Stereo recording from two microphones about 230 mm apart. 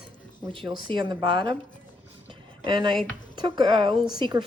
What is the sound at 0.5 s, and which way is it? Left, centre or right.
Speech, right.